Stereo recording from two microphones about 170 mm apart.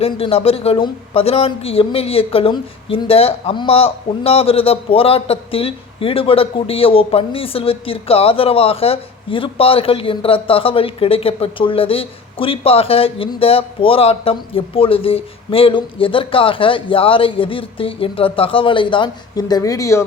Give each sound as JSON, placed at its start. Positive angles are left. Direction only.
{"t": 0.0, "sound": "a man's voice", "side_deg": 35}